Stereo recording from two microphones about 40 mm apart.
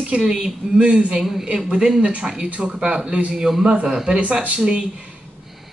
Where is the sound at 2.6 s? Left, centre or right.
Right.